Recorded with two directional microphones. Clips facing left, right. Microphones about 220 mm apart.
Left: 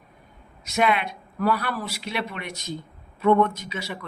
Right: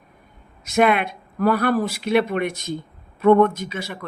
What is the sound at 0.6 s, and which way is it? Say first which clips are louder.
Speech: right 5 dB; 50° right (ahead or behind).